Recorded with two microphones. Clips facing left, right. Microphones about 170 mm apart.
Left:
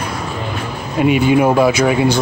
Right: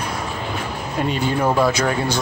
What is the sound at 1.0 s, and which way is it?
Speech, 10° left (ahead or behind).